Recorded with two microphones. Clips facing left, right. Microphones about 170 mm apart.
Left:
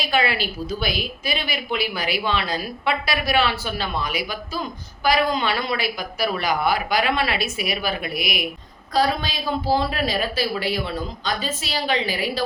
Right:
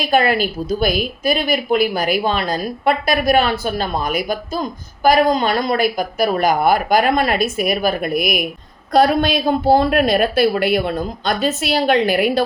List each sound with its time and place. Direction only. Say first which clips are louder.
0.0 s a woman's voice: right 7 dB; 50° right (ahead or behind)
8.9 s a woman's voice: right 8 dB; 60° right (ahead or behind)